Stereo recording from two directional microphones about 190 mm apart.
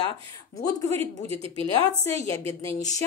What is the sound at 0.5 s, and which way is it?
Speech, 20° left (ahead or behind).